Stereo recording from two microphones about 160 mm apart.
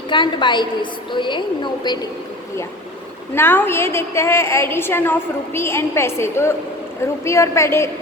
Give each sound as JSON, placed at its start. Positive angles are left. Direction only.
{"t": 0.1, "sound": "a woman's voice", "side_deg": 30}
{"t": 3.3, "sound": "a woman's voice", "side_deg": 15}